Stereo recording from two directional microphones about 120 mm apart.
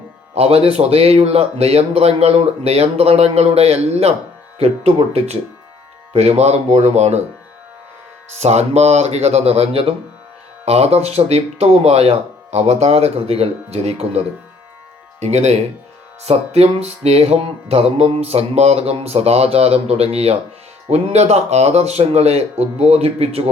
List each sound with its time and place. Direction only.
0.3 s music: 55° right (ahead or behind)
8.4 s music: 65° right (ahead or behind)
15.2 s speech: 70° right (ahead or behind)
16.2 s music: 60° right (ahead or behind)